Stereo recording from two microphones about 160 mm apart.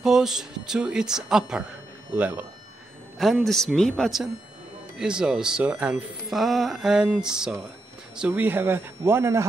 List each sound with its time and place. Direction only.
0.0 s a man's voice: 5° right (ahead or behind)
3.2 s a man's voice: centre (ahead or behind); by 9.5 s 15° right (ahead or behind)